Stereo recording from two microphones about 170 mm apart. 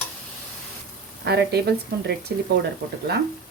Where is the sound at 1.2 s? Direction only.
75° right (ahead or behind).